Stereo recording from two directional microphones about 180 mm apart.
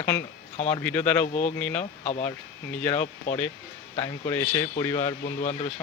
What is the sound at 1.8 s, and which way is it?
Speech, 35° left (ahead or behind).